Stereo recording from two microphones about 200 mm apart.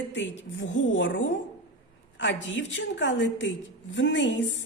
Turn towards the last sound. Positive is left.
turn(degrees=65)  # may be behind; listen again after turning